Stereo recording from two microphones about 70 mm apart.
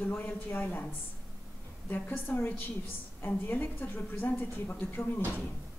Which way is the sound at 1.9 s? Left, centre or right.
Left.